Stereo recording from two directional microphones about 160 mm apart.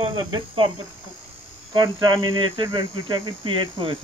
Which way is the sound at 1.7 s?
30° right (ahead or behind).